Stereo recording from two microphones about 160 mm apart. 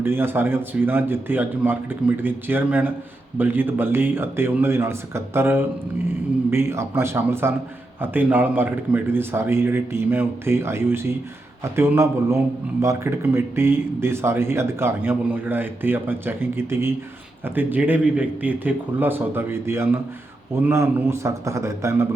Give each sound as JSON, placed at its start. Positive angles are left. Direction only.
{"t": 0.0, "sound": "a man's voice", "side_deg": -15}